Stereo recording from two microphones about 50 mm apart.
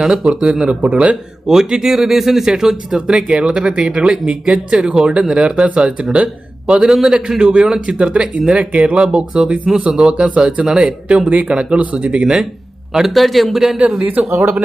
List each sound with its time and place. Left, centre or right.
0.0 s speech: centre
1.5 s speech: centre
12.9 s a man's voice: centre
14.3 s speech: right